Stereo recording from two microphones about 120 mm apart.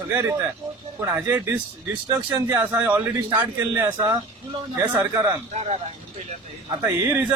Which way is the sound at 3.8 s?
25° right (ahead or behind).